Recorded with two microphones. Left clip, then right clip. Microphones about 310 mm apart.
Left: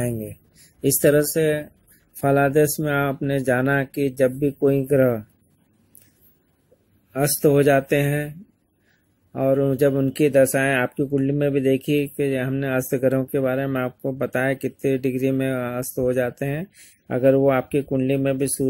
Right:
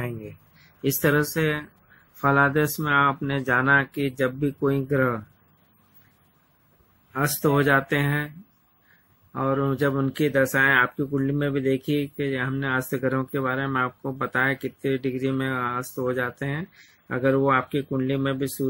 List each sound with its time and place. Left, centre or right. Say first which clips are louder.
0.7 s speech: left 5 dB; centre
7.2 s speech: left 5 dB; centre
9.3 s speech: left 5 dB; centre